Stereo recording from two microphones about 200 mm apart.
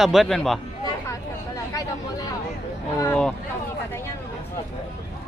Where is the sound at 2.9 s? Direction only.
15° left (ahead or behind).